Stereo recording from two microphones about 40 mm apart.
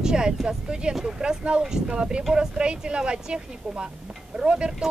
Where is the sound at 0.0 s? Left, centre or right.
Centre.